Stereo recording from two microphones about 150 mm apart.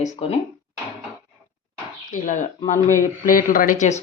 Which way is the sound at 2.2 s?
55° left (ahead or behind).